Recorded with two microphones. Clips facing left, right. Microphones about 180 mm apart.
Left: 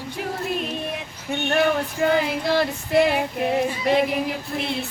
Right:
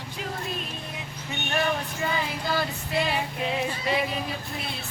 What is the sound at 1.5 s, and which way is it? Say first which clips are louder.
Female singing: left 6 dB; 65° left (ahead or behind).